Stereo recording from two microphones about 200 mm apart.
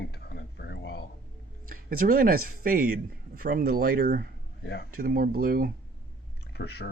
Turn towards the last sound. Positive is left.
turn(degrees=55)  # may be behind; listen again after turning